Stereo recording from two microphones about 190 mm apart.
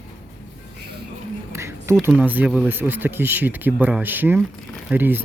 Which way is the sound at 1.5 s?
15° right (ahead or behind).